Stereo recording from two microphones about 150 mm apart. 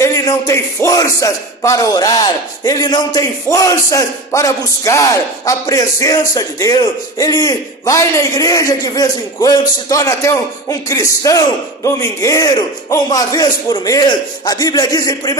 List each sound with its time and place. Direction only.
0.0 s speech: 20° left (ahead or behind)